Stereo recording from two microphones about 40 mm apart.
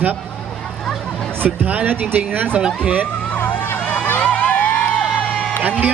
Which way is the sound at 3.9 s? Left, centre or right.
Left.